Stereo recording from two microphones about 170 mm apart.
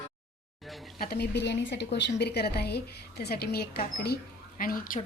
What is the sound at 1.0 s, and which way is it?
A woman's voice, 70° left (ahead or behind).